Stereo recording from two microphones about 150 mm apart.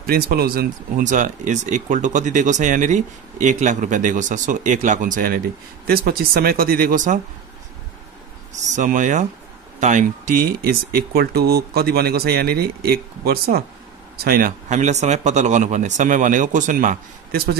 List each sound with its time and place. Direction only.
0.0 s speech: 90° right; by 5.4 s 65° right (ahead or behind)
5.9 s speech: 80° right
8.5 s speech: 55° right (ahead or behind); by 14.5 s 80° right
14.7 s a man's voice: 50° right (ahead or behind); by 17.6 s 70° right (ahead or behind)